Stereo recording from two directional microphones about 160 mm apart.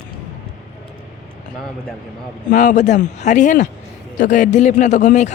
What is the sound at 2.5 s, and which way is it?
A man's voice, 50° left (ahead or behind).